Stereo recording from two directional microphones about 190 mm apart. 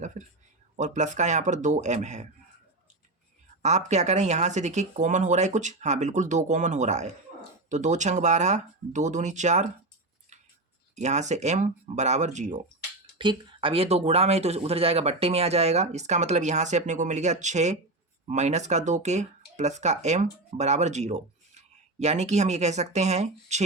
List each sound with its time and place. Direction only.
0.2 s speech: 35° right (ahead or behind)
3.6 s speech: 35° right (ahead or behind)
10.9 s speech: 35° right (ahead or behind)
13.1 s speech: 25° right (ahead or behind)